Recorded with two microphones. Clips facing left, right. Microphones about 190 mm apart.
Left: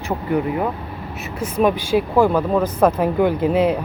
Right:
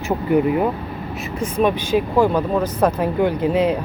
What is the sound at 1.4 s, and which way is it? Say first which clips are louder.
Speech: left 1 dB; 5° left (ahead or behind).